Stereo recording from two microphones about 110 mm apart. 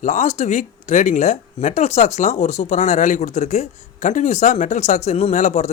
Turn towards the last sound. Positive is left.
turn(degrees=90)